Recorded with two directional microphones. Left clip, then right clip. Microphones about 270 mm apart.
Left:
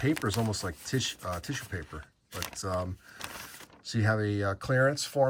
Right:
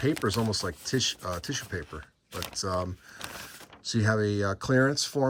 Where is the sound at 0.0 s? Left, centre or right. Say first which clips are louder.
Right 2 dB; centre.